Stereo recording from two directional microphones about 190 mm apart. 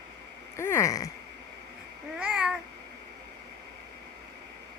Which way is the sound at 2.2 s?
5° right (ahead or behind).